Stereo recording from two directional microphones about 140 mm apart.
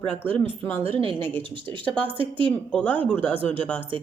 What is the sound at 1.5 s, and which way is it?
Speech, 35° right (ahead or behind).